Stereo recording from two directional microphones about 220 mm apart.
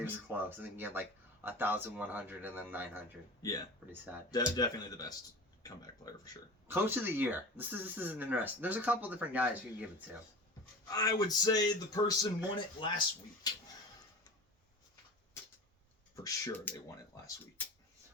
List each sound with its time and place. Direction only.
0.0 s speech: 10° right (ahead or behind)
3.4 s speech: 15° left (ahead or behind)
6.7 s speech: 10° right (ahead or behind)
10.8 s speech: 15° left (ahead or behind)
16.1 s speech: 15° left (ahead or behind)